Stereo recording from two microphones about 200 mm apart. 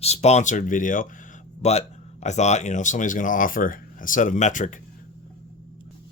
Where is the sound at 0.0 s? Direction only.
30° left (ahead or behind).